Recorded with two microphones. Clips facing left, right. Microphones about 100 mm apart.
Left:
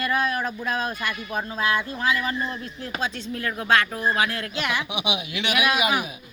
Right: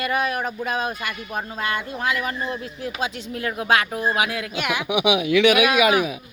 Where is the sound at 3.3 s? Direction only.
20° right (ahead or behind).